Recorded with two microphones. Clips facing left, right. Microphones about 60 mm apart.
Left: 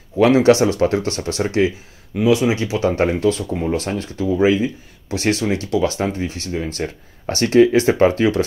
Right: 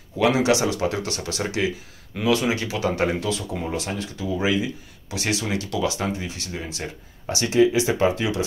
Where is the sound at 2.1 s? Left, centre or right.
Centre; by 6.8 s left.